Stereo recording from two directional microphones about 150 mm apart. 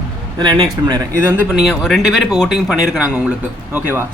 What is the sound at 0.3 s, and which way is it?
Speech, 30° right (ahead or behind).